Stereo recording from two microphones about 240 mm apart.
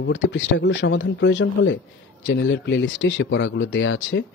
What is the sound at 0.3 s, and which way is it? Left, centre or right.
A man's voice, left.